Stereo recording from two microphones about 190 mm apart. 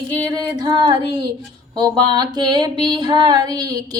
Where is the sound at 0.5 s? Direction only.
20° right (ahead or behind).